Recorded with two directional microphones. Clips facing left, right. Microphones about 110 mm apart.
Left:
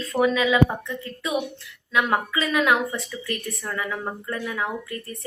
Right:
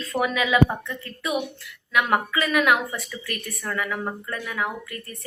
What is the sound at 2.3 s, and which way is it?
A woman's voice, 25° left (ahead or behind).